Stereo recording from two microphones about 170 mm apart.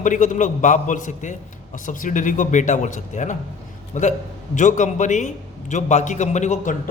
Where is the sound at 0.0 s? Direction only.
50° left (ahead or behind).